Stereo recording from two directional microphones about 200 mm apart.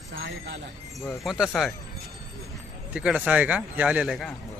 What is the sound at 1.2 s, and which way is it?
Speech, centre (ahead or behind).